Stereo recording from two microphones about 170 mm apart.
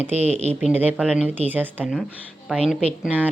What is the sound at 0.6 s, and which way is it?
Speech, 5° right (ahead or behind).